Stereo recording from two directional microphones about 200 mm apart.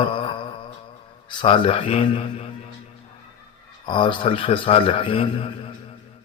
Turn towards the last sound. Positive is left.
turn(degrees=25)  # may be behind; listen again after turning